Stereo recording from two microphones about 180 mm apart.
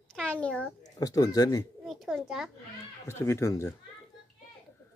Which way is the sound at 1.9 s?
Centre (ahead or behind).